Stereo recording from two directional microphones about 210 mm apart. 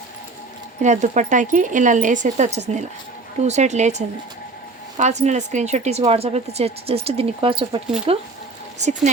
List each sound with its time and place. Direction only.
0.8 s speech: 35° right (ahead or behind)